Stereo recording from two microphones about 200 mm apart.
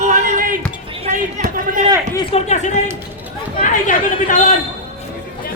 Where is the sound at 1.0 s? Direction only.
40° right (ahead or behind).